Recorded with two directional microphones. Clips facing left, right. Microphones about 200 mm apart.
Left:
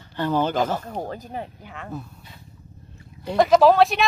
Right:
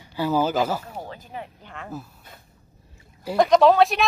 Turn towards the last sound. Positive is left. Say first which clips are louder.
# left 1 dB
turn(degrees=0)  # may be behind; listen again after turning